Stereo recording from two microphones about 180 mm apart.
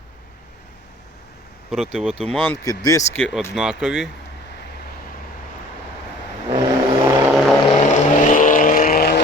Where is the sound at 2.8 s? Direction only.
20° left (ahead or behind).